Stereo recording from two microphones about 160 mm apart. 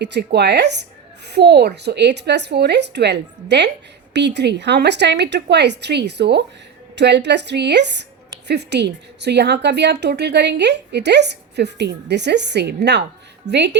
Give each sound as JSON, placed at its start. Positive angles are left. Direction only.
{"t": 0.0, "sound": "a woman's voice", "side_deg": -90}
{"t": 13.5, "sound": "speech", "side_deg": -45}